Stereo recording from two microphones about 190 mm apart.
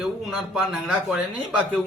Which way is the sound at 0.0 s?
5° right (ahead or behind).